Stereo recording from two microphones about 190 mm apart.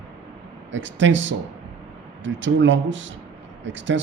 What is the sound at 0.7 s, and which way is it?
A man's voice, 80° right.